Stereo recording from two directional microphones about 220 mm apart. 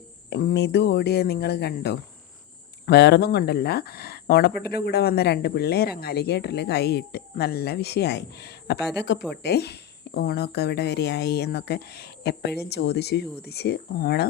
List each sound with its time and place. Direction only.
0.3 s speech: 50° left (ahead or behind)